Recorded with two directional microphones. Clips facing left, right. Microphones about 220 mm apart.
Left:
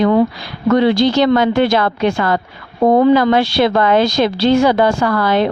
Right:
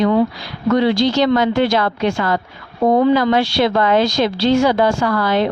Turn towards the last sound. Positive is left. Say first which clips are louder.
# left 2 dB
turn(degrees=55)  # may be behind; listen again after turning